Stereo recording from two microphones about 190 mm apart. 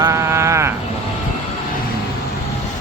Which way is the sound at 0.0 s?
15° right (ahead or behind).